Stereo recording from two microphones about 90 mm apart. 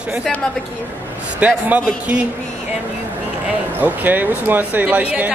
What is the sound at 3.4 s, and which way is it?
Speech, 20° right (ahead or behind).